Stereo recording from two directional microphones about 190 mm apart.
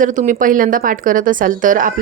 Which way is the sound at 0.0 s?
40° right (ahead or behind).